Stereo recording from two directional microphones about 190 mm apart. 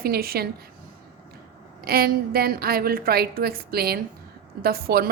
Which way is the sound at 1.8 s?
55° right (ahead or behind).